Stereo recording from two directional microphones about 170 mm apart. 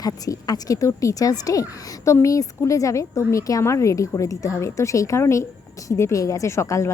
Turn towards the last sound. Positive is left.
turn(degrees=15)  # may be behind; listen again after turning